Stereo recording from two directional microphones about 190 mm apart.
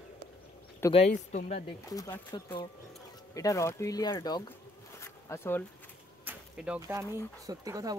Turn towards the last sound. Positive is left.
turn(degrees=-20)  # may be behind; listen again after turning